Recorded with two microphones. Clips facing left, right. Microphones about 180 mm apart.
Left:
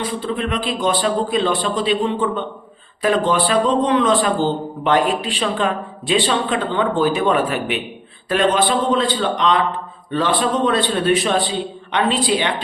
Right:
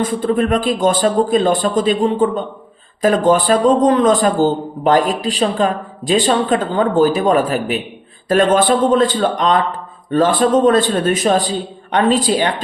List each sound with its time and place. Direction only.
0.0 s a man's voice: 45° right (ahead or behind)